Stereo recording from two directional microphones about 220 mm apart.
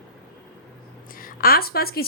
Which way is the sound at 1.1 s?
40° left (ahead or behind).